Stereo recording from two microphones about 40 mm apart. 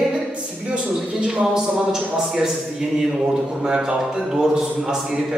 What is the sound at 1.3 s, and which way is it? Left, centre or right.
A man's voice, centre.